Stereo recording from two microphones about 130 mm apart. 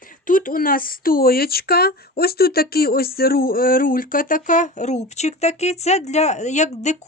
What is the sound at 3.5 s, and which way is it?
Speech, 90° left.